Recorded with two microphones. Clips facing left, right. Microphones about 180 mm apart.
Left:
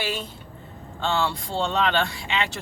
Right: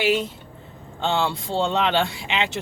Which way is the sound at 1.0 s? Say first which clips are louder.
Right 2 dB; 20° right (ahead or behind).